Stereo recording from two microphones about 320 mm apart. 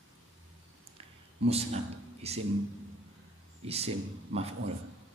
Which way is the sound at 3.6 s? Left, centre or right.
Centre.